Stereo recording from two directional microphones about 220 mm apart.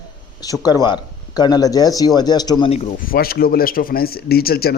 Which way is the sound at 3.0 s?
40° left (ahead or behind).